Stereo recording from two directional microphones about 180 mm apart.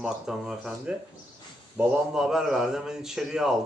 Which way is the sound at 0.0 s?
5° right (ahead or behind).